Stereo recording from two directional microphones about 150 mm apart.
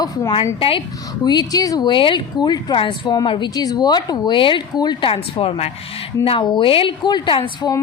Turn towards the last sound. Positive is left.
turn(degrees=35)  # may be behind; listen again after turning